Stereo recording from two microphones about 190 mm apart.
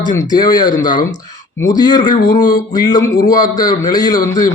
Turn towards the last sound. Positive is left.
turn(degrees=20)  # may be behind; listen again after turning